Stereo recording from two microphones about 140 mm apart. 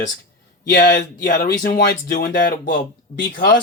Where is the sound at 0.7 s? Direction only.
80° left.